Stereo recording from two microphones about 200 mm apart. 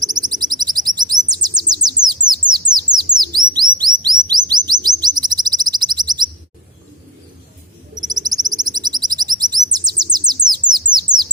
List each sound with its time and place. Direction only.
0.0 s chirp: 20° right (ahead or behind)
2.0 s bird: 20° right (ahead or behind)
8.0 s bird: 20° right (ahead or behind)